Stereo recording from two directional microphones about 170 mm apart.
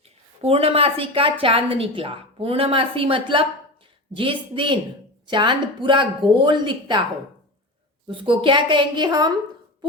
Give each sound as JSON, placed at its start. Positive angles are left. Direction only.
{"t": 0.4, "sound": "a woman's voice", "side_deg": -35}
{"t": 8.0, "sound": "speech", "side_deg": -30}